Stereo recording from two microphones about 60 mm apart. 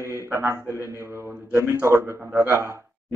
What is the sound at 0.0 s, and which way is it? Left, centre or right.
A man's voice, right.